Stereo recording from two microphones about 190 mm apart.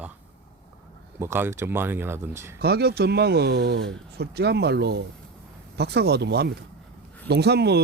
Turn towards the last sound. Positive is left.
turn(degrees=-60)  # may be behind; listen again after turning